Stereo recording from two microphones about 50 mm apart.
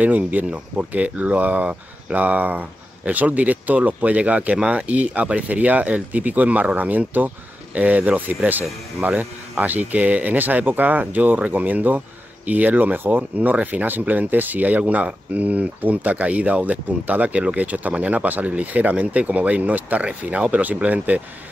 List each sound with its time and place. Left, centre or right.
0.0 s speech: right